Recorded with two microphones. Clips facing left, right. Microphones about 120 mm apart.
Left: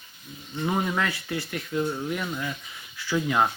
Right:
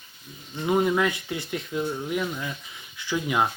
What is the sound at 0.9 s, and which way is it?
Speech, 20° right (ahead or behind).